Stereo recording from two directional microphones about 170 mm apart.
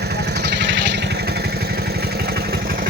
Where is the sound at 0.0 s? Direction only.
70° right (ahead or behind).